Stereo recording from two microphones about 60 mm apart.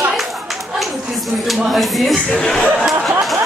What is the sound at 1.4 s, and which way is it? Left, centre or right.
Speech, centre.